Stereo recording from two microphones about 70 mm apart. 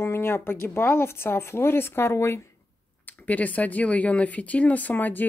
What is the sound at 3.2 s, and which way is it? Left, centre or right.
Speech, left.